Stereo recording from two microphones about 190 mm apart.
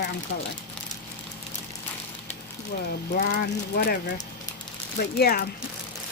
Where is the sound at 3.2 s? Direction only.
50° left (ahead or behind).